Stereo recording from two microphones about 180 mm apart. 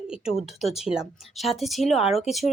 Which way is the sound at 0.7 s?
35° left (ahead or behind).